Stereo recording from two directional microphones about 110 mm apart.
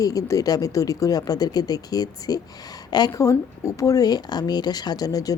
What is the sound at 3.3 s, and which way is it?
Speech, 30° left (ahead or behind).